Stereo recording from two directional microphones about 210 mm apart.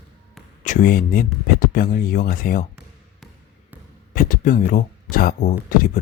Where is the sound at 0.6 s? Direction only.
40° left (ahead or behind).